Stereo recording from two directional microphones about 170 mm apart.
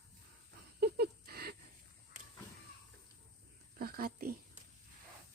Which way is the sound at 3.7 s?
60° right (ahead or behind).